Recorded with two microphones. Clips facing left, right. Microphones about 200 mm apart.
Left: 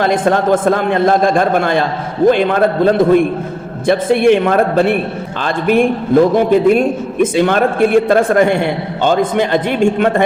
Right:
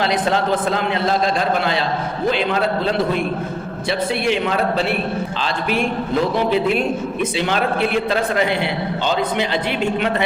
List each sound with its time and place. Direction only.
0.0 s a man's voice: 50° left (ahead or behind)